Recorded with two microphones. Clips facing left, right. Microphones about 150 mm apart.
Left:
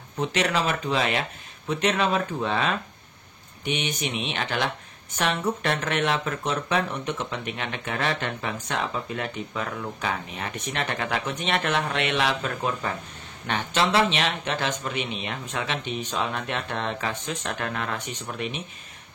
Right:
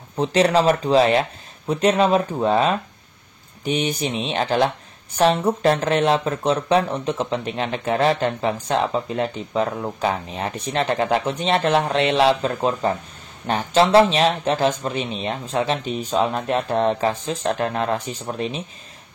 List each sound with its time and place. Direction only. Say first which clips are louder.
0.2 s speech: right 8 dB; 35° right (ahead or behind)